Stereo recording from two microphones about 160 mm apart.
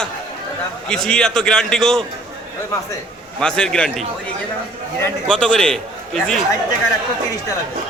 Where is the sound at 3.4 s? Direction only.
5° left (ahead or behind).